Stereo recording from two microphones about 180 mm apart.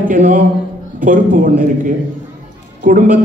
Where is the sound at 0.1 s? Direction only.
45° right (ahead or behind).